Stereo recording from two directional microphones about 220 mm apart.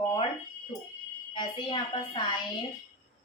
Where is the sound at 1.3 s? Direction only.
20° left (ahead or behind).